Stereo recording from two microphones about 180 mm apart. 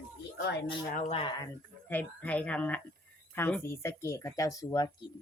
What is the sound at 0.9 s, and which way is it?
Speech, 45° left (ahead or behind).